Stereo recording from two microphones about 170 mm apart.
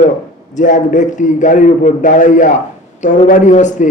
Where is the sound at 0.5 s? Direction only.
50° left (ahead or behind).